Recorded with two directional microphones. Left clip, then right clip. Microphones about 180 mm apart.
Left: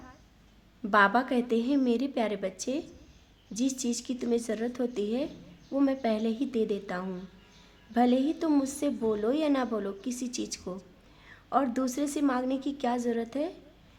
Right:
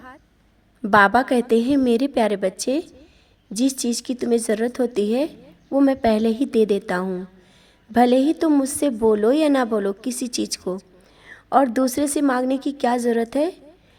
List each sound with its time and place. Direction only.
0.8 s a woman's voice: 40° right (ahead or behind)